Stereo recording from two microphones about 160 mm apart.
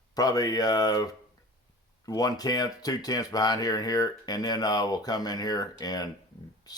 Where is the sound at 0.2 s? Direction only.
25° left (ahead or behind).